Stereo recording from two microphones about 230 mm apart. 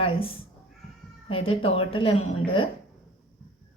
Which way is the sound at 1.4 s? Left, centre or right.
Left.